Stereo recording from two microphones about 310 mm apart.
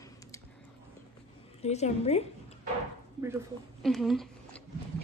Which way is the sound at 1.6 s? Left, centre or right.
Left.